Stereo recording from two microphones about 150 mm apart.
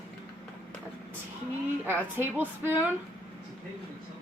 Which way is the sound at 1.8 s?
15° right (ahead or behind).